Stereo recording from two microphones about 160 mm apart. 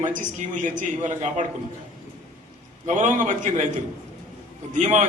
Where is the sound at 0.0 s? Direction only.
50° right (ahead or behind).